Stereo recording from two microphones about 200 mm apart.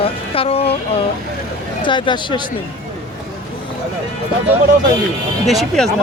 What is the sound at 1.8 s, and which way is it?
Speech, 25° left (ahead or behind).